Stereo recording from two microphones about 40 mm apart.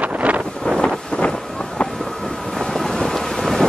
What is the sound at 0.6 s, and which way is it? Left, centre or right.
Wind noise, centre.